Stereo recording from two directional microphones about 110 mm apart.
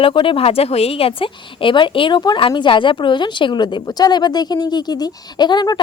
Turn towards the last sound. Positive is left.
turn(degrees=45)  # may be behind; listen again after turning